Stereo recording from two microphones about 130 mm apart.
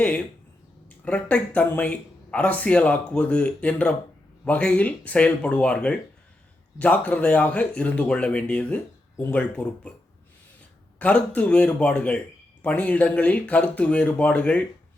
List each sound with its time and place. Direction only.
0.0 s a sound: 10° left (ahead or behind)
1.0 s speech: 10° left (ahead or behind)
11.0 s speech: 10° left (ahead or behind)